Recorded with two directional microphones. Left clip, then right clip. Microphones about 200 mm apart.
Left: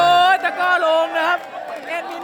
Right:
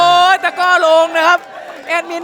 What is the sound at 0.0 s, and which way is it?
Music, 25° right (ahead or behind).